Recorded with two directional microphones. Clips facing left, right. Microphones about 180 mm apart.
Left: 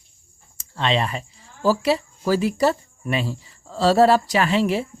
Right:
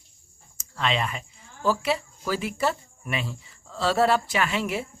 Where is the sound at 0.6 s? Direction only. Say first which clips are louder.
Left 4 dB; 30° left (ahead or behind).